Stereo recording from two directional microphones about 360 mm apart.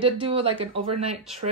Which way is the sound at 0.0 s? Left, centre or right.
Centre.